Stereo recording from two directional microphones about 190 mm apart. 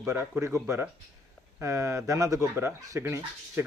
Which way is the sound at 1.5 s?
15° right (ahead or behind).